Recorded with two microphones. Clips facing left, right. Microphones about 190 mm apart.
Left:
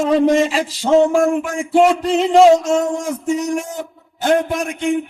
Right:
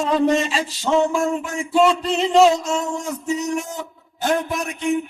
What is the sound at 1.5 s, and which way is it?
Speech, 90° left.